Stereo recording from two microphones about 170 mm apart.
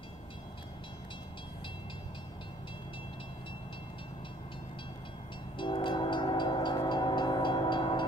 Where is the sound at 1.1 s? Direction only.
30° left (ahead or behind).